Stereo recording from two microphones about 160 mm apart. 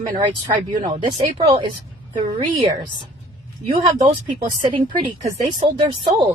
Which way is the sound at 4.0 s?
30° right (ahead or behind).